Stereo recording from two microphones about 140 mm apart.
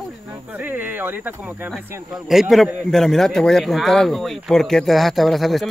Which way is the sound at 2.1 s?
5° right (ahead or behind).